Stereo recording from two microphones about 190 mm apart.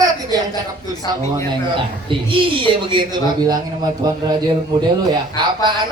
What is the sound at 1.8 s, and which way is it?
Speech, 25° right (ahead or behind).